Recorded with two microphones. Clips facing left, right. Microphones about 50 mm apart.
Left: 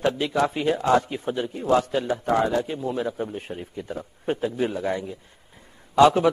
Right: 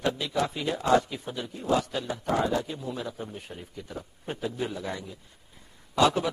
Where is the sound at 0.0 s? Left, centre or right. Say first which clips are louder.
Left 5 dB; left.